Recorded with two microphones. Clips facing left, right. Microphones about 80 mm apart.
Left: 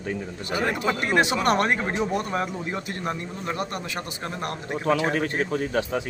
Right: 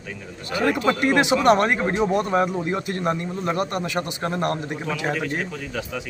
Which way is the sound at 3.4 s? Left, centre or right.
Right.